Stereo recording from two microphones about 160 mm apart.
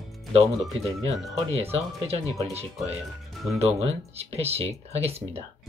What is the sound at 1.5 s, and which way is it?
Speech, 40° right (ahead or behind).